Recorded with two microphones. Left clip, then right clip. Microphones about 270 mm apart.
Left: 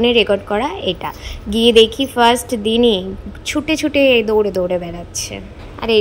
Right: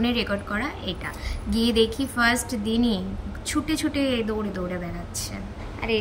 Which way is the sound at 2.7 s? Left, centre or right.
Centre.